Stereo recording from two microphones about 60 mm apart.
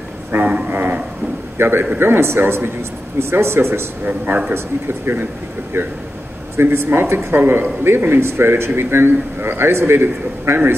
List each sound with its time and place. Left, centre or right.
0.3 s a sound: right
1.6 s a man's voice: right
4.0 s a man's voice: right
4.8 s speech: right
6.5 s a man's voice: right